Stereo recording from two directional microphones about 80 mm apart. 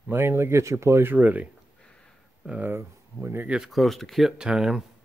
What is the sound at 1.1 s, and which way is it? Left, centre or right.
Speech, centre.